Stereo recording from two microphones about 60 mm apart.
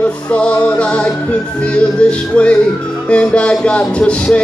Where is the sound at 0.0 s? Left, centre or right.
Left.